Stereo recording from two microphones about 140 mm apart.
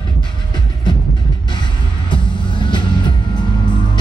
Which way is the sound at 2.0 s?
35° left (ahead or behind).